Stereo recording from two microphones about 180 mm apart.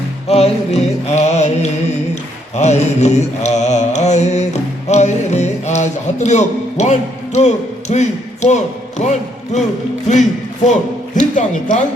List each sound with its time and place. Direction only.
0.3 s music: 35° left (ahead or behind)
2.6 s speech: 40° left (ahead or behind)